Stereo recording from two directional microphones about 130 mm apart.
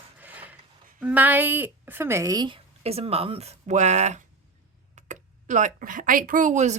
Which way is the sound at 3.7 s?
65° right (ahead or behind).